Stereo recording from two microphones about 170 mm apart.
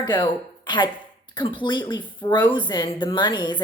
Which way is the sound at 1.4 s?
30° left (ahead or behind).